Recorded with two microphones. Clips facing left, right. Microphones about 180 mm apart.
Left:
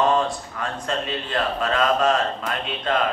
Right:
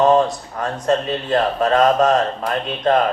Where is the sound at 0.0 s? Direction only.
40° right (ahead or behind).